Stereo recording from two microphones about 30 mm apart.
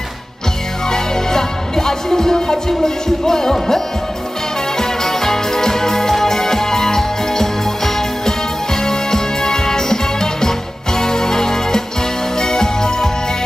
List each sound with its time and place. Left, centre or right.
0.8 s music: centre